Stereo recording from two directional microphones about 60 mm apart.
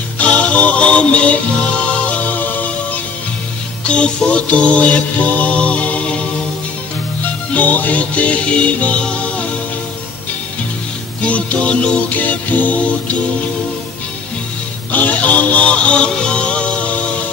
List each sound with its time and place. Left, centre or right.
0.2 s music: left
3.8 s mantra: centre
7.2 s music: left
11.2 s mantra: left
14.9 s music: left